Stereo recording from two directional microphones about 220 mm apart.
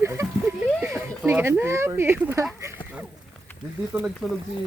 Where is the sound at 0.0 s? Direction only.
10° right (ahead or behind).